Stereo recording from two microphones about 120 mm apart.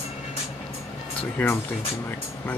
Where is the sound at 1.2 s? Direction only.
15° left (ahead or behind).